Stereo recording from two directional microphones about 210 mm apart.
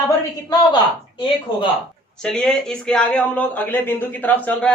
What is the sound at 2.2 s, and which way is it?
Speech, 5° left (ahead or behind).